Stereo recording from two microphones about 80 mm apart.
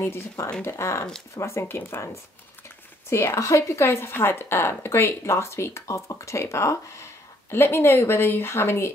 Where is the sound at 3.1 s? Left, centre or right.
Left.